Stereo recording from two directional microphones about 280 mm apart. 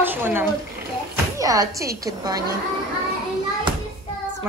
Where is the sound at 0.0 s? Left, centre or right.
Centre.